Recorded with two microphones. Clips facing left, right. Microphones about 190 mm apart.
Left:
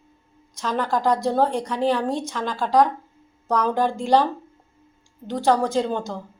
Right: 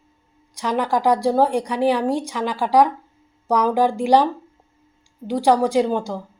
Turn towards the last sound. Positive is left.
turn(degrees=-10)  # may be behind; listen again after turning